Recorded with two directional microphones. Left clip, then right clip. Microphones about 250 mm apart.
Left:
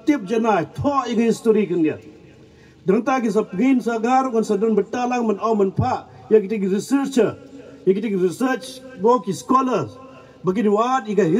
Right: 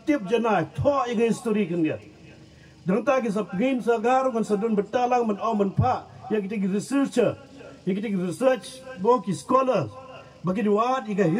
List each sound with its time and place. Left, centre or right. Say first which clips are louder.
0.0 s speech: left 4 dB; left